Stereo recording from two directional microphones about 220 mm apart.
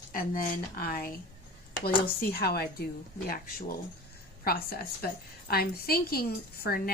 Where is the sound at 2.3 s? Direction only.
45° left (ahead or behind).